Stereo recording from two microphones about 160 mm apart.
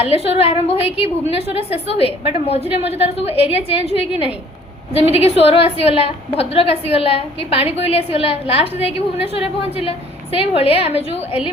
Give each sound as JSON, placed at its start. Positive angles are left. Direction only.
{"t": 0.0, "sound": "a woman's voice", "side_deg": 40}